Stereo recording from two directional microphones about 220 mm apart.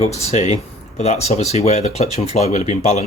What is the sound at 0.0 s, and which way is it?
Speech, 30° left (ahead or behind).